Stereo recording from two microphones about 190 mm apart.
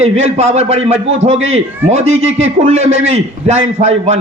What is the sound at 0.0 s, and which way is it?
A man's voice, 35° right (ahead or behind).